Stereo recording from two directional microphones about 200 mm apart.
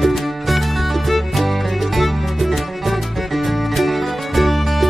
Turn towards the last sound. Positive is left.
turn(degrees=0)  # may be behind; listen again after turning